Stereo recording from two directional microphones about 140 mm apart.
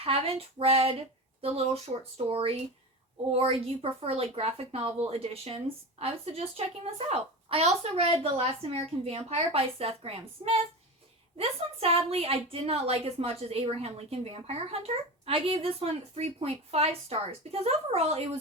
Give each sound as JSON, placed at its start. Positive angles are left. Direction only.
{"t": 0.0, "sound": "a woman's voice", "side_deg": -45}